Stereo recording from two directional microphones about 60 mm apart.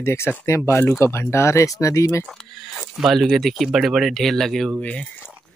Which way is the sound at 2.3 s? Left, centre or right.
Centre.